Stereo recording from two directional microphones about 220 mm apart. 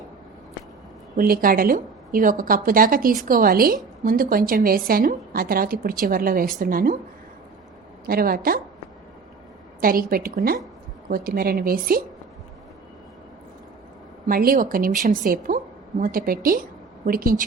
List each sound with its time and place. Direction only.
1.1 s a woman's voice: 40° right (ahead or behind)
8.0 s a woman's voice: 40° right (ahead or behind)
9.8 s a woman's voice: 40° right (ahead or behind)
14.3 s a woman's voice: 40° right (ahead or behind)